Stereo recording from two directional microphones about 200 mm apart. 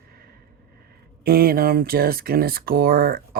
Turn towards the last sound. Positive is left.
turn(degrees=-50)  # may be behind; listen again after turning